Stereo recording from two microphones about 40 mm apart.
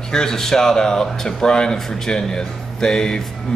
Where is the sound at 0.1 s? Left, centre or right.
Centre.